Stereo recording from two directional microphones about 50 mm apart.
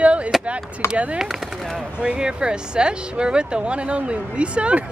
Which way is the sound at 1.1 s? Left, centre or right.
Centre.